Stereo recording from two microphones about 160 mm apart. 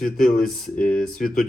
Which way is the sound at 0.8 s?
65° left (ahead or behind).